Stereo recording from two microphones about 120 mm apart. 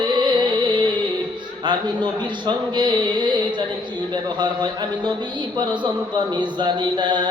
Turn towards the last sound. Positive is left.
turn(degrees=-40)  # may be behind; listen again after turning